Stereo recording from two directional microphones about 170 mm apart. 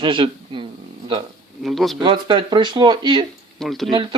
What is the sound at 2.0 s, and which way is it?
Speech, 30° right (ahead or behind).